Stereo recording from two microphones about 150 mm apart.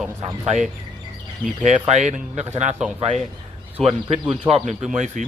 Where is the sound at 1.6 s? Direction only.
50° right (ahead or behind).